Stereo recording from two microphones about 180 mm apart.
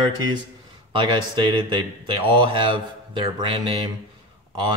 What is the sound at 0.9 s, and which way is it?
Speech, 25° right (ahead or behind).